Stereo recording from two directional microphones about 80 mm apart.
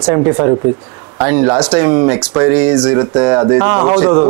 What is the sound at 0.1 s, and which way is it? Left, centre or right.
Speech, right.